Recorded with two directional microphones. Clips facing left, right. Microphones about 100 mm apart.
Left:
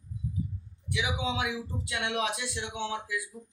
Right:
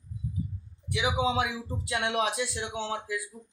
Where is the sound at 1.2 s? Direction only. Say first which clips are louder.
Right 4 dB; 35° right (ahead or behind).